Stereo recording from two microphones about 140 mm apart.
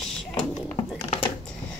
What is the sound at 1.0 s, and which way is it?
Typing, 45° left (ahead or behind).